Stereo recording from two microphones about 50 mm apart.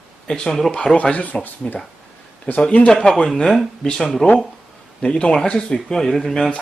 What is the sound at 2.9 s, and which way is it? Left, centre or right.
A man's voice, centre.